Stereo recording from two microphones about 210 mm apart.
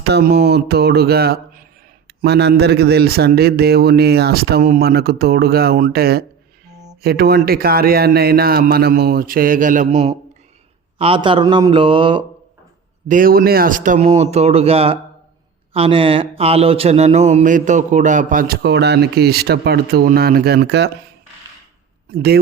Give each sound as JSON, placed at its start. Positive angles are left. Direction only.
{"t": 0.0, "sound": "a man's voice", "side_deg": -50}
{"t": 13.1, "sound": "a man's voice", "side_deg": -40}
{"t": 22.1, "sound": "a man's voice", "side_deg": -50}